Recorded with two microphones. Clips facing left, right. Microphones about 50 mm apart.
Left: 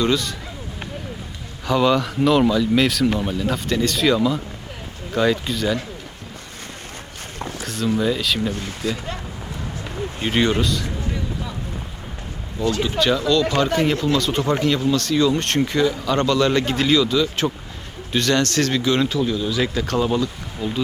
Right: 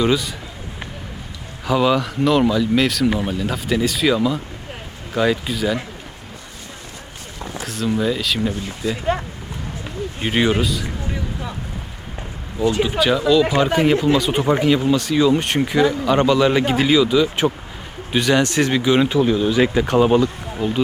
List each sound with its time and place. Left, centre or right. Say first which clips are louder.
0.0 s speech: right 2 dB; centre
1.6 s speech: right 1 dB; centre
7.6 s a sound: right 1 dB; centre
7.9 s speech: even; centre
8.9 s speech: right 8 dB; right
10.2 s speech: right 1 dB; centre
12.5 s speech: right 3 dB; centre